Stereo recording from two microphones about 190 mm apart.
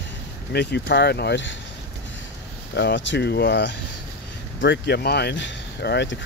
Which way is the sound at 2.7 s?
70° left (ahead or behind).